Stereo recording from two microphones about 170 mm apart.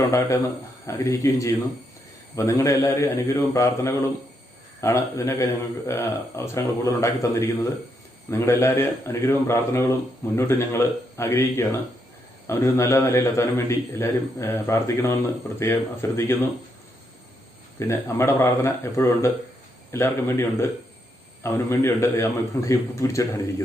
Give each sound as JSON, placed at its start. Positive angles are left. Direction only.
{"t": 0.9, "sound": "a man's voice", "side_deg": 15}
{"t": 17.7, "sound": "a man's voice", "side_deg": 15}